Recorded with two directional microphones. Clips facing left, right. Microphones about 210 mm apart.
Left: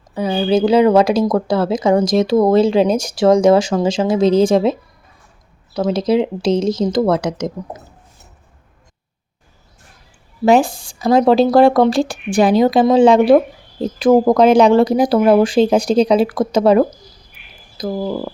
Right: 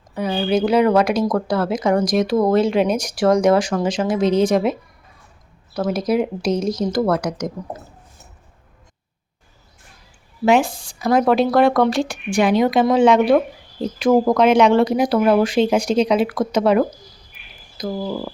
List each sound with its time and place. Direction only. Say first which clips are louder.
0.1 s speech: left 4 dB; 25° left (ahead or behind)
10.4 s speech: left 3 dB; 35° left (ahead or behind)